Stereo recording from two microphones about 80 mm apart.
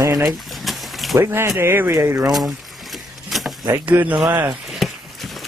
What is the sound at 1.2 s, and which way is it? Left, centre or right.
Speech, right.